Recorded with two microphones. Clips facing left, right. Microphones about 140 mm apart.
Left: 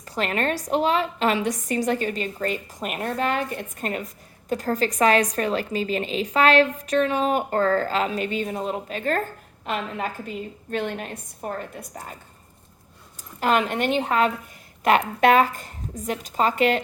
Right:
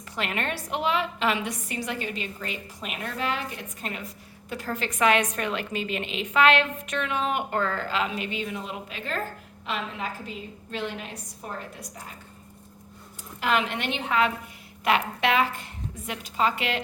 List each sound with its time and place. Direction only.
0.0 s a woman's voice: 40° left (ahead or behind)
13.4 s a woman's voice: 45° left (ahead or behind)